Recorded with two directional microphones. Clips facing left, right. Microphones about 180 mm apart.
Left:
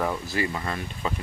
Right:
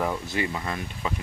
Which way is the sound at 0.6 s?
10° right (ahead or behind).